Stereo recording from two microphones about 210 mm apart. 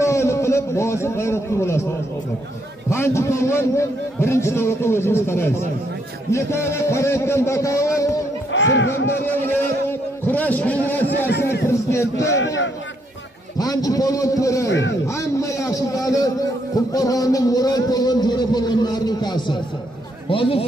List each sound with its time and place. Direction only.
0.0 s a sound: 15° left (ahead or behind)
2.9 s a man's voice: 15° left (ahead or behind)
8.5 s speech: 60° left (ahead or behind)
9.2 s a sound: 10° left (ahead or behind)
11.6 s music: 15° left (ahead or behind)
13.6 s a man's voice: 15° left (ahead or behind)
14.7 s speech: 60° left (ahead or behind)
15.0 s a man's voice: 15° left (ahead or behind)